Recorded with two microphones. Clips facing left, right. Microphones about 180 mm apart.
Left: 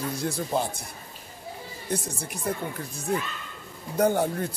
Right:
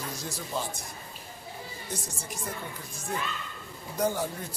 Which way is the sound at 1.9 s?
60° left (ahead or behind).